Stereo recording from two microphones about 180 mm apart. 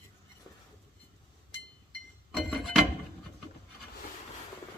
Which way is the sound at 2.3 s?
Centre (ahead or behind).